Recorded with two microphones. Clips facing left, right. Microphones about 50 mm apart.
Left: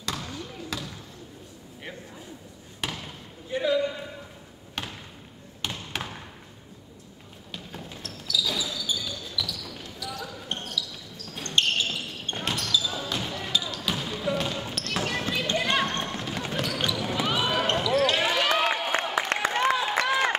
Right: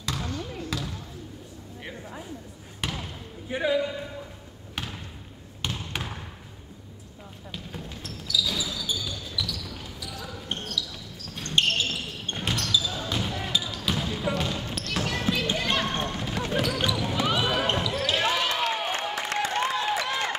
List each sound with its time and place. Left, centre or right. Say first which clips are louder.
0.0 s basketball bounce: right 2 dB; centre
2.8 s basketball bounce: right 1 dB; centre
3.4 s a man's voice: even; centre
4.8 s basketball bounce: even; centre
5.6 s trickle: even; centre
7.5 s basketball bounce: even; centre
18.5 s a sound: left 3 dB; centre
19.3 s a sound: even; left
20.1 s a sound: left 4 dB; centre